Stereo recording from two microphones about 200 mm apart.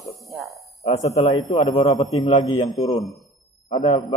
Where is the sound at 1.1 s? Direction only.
30° left (ahead or behind).